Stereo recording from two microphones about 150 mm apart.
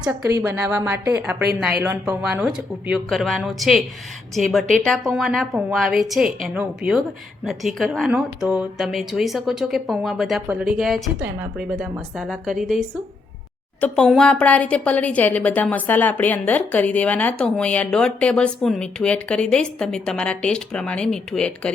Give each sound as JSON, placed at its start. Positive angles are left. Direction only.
{"t": 0.2, "sound": "a woman's voice", "side_deg": -20}
{"t": 11.2, "sound": "speech", "side_deg": -10}
{"t": 13.8, "sound": "a woman's voice", "side_deg": 5}